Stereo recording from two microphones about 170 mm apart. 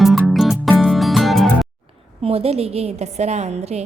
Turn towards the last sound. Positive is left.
turn(degrees=-40)  # may be behind; listen again after turning